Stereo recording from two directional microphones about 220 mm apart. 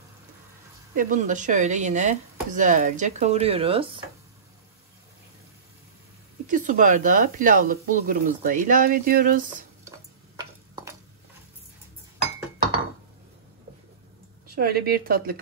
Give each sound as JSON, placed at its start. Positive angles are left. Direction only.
{"t": 0.9, "sound": "speech", "side_deg": -35}
{"t": 6.4, "sound": "speech", "side_deg": -35}
{"t": 9.8, "sound": "a sound", "side_deg": -15}
{"t": 14.5, "sound": "speech", "side_deg": -45}